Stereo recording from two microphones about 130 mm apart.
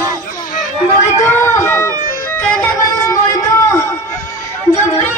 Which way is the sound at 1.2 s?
20° left (ahead or behind).